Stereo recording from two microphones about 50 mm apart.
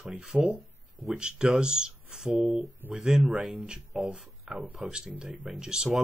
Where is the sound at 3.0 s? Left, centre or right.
Centre.